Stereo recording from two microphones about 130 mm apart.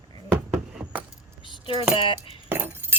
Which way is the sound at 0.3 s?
10° right (ahead or behind).